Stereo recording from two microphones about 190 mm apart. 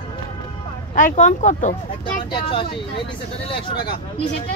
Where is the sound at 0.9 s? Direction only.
45° left (ahead or behind).